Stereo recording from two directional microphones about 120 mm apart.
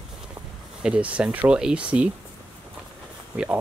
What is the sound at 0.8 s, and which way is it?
Speech, 10° right (ahead or behind).